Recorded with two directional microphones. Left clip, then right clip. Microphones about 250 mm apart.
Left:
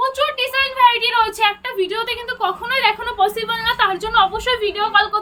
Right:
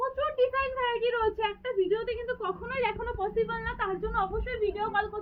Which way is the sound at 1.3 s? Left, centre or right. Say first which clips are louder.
Left 11 dB; left.